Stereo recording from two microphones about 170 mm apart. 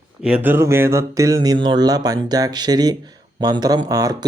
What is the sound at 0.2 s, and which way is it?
Speech, 5° right (ahead or behind).